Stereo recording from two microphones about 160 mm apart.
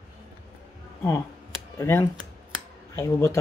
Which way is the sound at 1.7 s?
15° left (ahead or behind).